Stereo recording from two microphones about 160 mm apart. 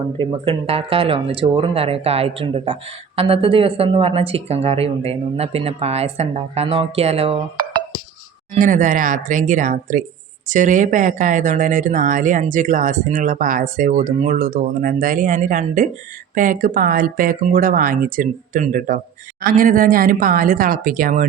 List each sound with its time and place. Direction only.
0.2 s speech: 35° right (ahead or behind)
8.5 s speech: 55° right (ahead or behind)